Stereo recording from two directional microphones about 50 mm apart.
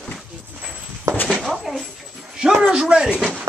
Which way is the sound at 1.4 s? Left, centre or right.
Centre.